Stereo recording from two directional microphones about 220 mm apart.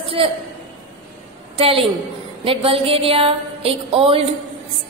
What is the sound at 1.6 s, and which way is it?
A woman's voice, 25° right (ahead or behind).